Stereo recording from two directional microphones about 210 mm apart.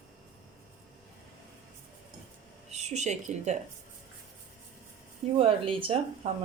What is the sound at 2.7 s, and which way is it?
Speech, 30° right (ahead or behind).